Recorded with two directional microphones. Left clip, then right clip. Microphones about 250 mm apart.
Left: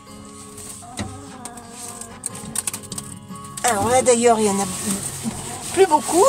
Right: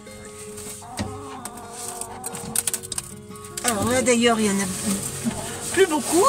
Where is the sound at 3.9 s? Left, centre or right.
Left.